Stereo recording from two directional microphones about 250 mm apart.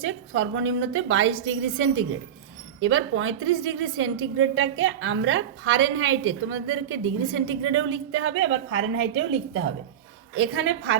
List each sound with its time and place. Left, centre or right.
0.0 s a woman's voice: right